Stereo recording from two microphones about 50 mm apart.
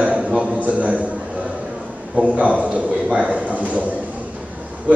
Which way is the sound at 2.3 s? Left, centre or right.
Right.